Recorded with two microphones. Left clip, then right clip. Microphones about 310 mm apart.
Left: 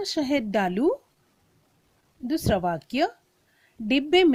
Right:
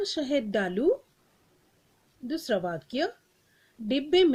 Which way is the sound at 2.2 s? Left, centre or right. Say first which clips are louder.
Left 4 dB; left.